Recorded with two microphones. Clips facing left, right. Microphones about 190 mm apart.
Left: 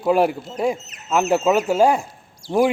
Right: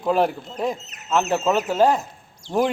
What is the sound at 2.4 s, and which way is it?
Speech, 35° left (ahead or behind).